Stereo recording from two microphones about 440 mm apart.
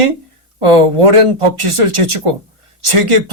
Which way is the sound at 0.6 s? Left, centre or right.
Right.